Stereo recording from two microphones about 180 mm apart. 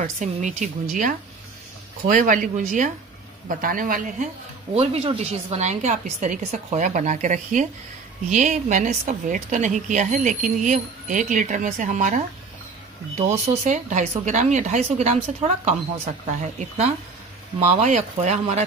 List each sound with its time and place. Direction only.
0.0 s speech: 45° right (ahead or behind)
4.7 s a woman's voice: 30° right (ahead or behind)
13.5 s a woman's voice: 40° right (ahead or behind)